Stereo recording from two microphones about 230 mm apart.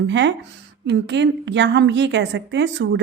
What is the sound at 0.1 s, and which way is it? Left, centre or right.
A woman's voice, right.